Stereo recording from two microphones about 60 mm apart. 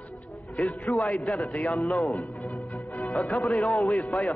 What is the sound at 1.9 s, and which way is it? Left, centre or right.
Speech, centre.